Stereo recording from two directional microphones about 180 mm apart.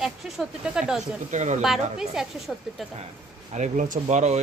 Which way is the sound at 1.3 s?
40° right (ahead or behind).